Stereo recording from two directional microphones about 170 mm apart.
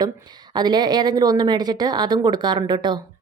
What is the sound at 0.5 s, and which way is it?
Speech, 25° right (ahead or behind).